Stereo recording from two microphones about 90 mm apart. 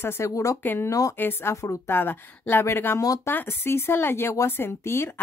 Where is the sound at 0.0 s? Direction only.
35° left (ahead or behind).